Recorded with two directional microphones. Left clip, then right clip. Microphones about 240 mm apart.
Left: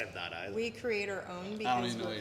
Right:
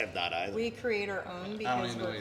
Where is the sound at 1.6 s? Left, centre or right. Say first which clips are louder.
Even; left.